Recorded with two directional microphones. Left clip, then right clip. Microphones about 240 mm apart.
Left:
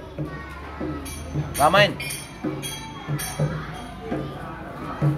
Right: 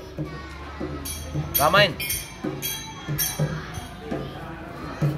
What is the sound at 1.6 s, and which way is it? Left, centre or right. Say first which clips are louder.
Speech: left 1 dB; centre.